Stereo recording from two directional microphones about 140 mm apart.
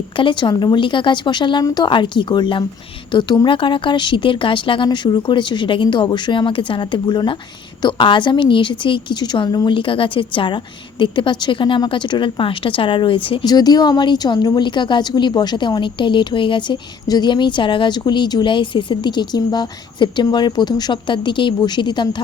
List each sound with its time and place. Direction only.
0.2 s a woman's voice: 35° left (ahead or behind)